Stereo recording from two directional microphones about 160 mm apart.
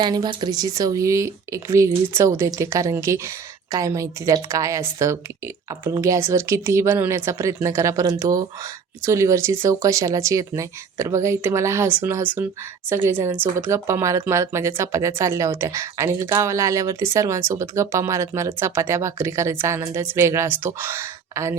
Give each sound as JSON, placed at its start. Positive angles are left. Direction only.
{"t": 0.0, "sound": "speech", "side_deg": -25}